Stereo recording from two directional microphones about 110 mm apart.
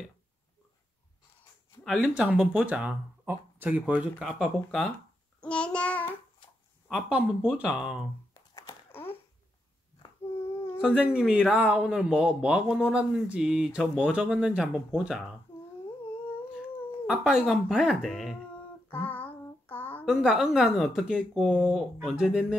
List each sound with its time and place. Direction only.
1.9 s speech: 5° right (ahead or behind)
4.2 s speech: centre (ahead or behind)
5.4 s child singing: 10° left (ahead or behind)
6.9 s speech: 10° right (ahead or behind)
10.8 s speech: 5° right (ahead or behind)
17.0 s speech: 5° right (ahead or behind)
18.9 s child singing: 15° left (ahead or behind)
20.1 s speech: 5° right (ahead or behind)